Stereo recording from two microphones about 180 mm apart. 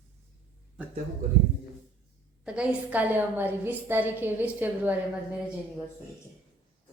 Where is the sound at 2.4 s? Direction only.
5° right (ahead or behind).